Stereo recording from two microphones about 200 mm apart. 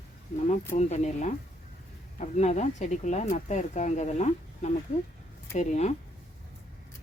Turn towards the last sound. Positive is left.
turn(degrees=35)  # may be behind; listen again after turning